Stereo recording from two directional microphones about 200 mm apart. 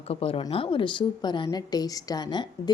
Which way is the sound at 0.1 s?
30° left (ahead or behind).